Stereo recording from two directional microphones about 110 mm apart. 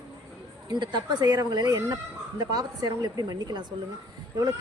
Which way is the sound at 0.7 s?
45° right (ahead or behind).